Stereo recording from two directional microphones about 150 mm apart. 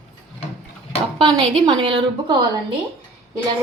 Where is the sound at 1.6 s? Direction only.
30° right (ahead or behind).